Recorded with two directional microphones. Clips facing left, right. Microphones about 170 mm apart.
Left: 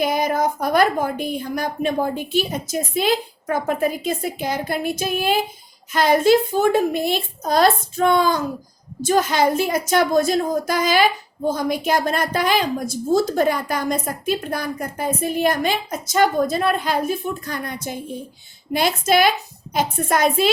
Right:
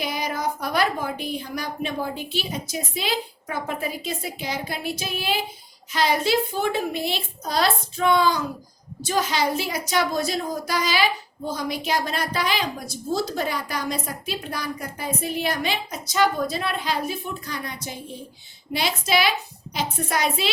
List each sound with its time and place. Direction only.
0.0 s a woman's voice: 50° left (ahead or behind)